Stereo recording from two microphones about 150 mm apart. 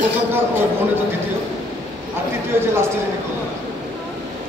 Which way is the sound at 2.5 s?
15° right (ahead or behind).